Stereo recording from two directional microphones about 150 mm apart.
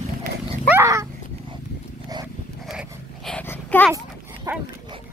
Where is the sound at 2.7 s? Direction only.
5° right (ahead or behind).